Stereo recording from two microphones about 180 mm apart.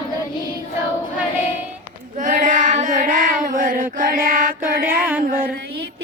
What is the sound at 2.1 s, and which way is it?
Child singing, 45° right (ahead or behind).